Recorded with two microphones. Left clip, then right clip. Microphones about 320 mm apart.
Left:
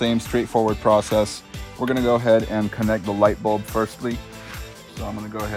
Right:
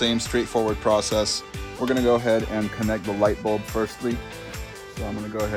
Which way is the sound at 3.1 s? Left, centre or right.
Left.